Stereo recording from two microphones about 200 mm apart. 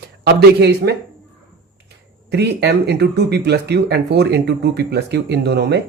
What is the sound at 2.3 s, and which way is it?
Speech, 55° right (ahead or behind).